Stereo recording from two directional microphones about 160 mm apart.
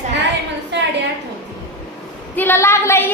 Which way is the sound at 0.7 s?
90° right.